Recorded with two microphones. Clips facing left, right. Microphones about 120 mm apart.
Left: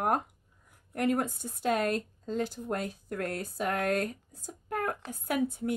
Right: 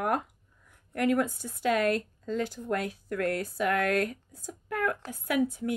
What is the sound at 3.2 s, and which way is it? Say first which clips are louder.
Speech: right 5 dB; 60° right (ahead or behind).